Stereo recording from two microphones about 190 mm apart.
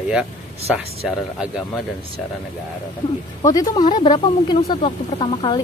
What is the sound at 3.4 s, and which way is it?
Speech, 20° left (ahead or behind).